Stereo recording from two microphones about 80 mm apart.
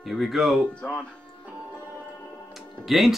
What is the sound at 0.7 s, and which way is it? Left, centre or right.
Speech, centre.